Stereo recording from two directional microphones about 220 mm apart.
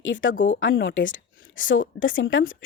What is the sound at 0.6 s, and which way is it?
A woman's voice, 60° left (ahead or behind).